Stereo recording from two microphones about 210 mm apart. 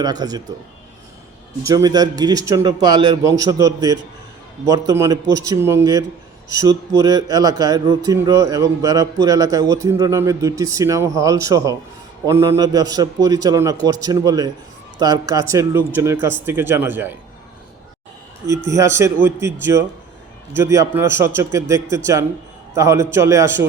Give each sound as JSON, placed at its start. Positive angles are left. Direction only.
{"t": 0.0, "sound": "speech", "side_deg": -20}
{"t": 1.6, "sound": "a man's voice", "side_deg": -20}
{"t": 18.7, "sound": "a man's voice", "side_deg": -15}